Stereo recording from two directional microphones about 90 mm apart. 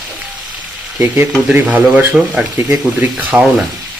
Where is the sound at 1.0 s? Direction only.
20° right (ahead or behind).